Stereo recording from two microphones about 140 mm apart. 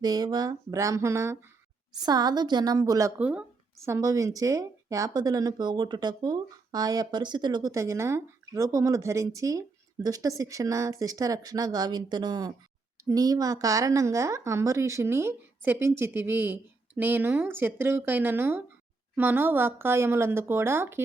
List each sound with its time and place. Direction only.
0.0 s speech: 30° right (ahead or behind)
3.2 s a woman's voice: 10° right (ahead or behind)
3.8 s a woman's voice: 20° right (ahead or behind)